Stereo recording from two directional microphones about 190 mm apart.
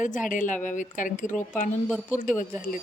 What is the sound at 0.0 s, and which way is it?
A woman's voice, 45° left (ahead or behind).